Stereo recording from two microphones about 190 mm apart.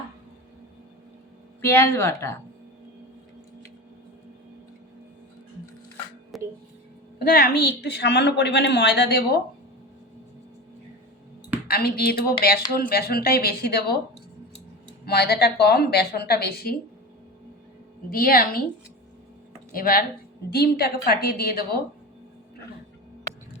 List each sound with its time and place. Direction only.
1.6 s speech: 10° left (ahead or behind)
6.3 s music: centre (ahead or behind)
7.2 s a woman's voice: 50° left (ahead or behind)
11.7 s speech: 55° left (ahead or behind)
15.0 s a woman's voice: 60° left (ahead or behind)
18.1 s speech: 50° left (ahead or behind)
19.7 s a woman's voice: 50° left (ahead or behind)